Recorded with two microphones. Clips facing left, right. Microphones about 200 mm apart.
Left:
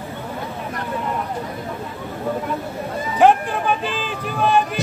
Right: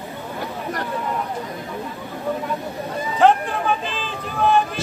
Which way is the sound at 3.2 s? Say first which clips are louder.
Left 2 dB; 10° left (ahead or behind).